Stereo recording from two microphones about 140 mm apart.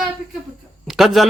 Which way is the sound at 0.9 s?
Centre (ahead or behind).